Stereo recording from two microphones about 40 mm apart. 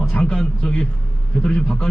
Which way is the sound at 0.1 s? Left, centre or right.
Left.